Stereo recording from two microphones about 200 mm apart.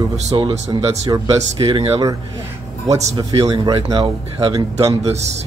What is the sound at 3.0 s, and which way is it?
Speech, 35° right (ahead or behind).